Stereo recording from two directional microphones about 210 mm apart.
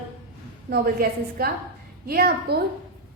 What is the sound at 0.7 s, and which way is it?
A woman's voice, 45° right (ahead or behind).